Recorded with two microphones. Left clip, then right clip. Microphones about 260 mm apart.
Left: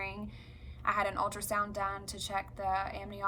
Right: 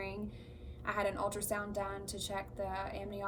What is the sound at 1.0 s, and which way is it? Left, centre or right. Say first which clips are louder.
A woman's voice: left 3 dB; centre.